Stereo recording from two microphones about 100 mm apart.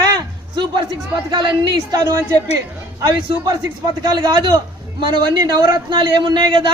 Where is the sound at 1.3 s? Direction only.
45° right (ahead or behind).